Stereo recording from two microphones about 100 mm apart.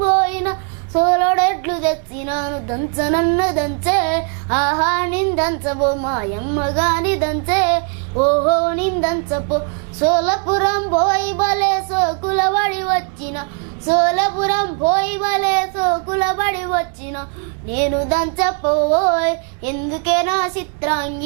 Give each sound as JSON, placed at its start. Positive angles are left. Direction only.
{"t": 0.0, "sound": "child singing", "side_deg": -10}
{"t": 4.4, "sound": "female singing", "side_deg": -15}
{"t": 12.3, "sound": "child singing", "side_deg": -10}
{"t": 14.4, "sound": "female singing", "side_deg": -10}
{"t": 14.7, "sound": "speech", "side_deg": -25}
{"t": 14.9, "sound": "female singing", "side_deg": -5}
{"t": 16.0, "sound": "speech", "side_deg": -25}
{"t": 16.2, "sound": "female singing", "side_deg": -10}